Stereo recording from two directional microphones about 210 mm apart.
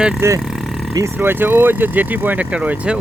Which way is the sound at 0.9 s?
10° right (ahead or behind).